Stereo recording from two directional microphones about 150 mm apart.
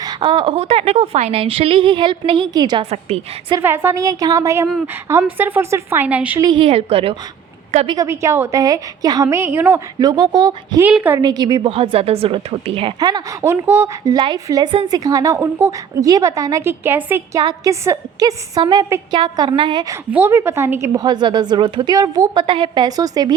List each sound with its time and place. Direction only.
0.0 s a woman's voice: 30° right (ahead or behind)
3.6 s a woman's voice: 15° right (ahead or behind)
6.4 s a woman's voice: 30° right (ahead or behind)
8.0 s a woman's voice: 20° right (ahead or behind)
10.8 s speech: 10° right (ahead or behind)
11.2 s a woman's voice: 25° right (ahead or behind)
13.0 s a woman's voice: 25° right (ahead or behind)
19.9 s a woman's voice: 15° right (ahead or behind)